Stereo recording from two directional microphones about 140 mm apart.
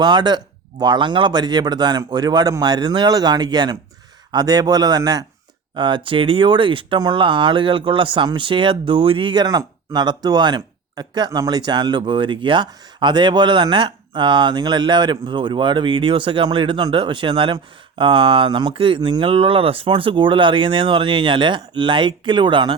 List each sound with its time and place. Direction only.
0.0 s a man's voice: 35° right (ahead or behind)